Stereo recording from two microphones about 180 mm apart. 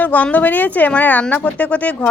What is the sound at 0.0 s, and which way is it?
Speech, 10° left (ahead or behind).